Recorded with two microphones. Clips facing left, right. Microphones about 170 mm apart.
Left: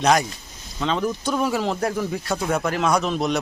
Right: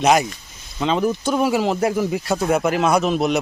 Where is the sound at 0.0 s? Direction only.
5° right (ahead or behind).